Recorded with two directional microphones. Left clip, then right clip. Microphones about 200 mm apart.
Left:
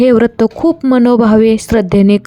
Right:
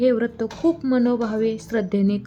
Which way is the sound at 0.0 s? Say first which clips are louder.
Left 11 dB; 50° left (ahead or behind).